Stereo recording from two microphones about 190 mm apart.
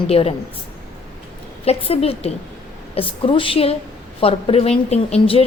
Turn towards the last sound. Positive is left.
turn(degrees=30)  # may be behind; listen again after turning